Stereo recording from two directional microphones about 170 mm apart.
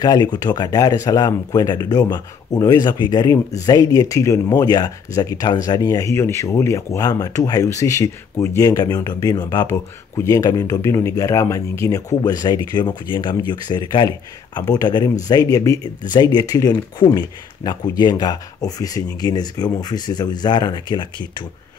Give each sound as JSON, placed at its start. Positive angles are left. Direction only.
{"t": 0.0, "sound": "speech", "side_deg": 25}